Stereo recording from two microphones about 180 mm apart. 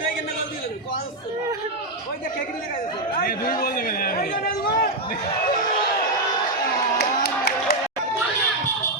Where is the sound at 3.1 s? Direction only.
50° left (ahead or behind).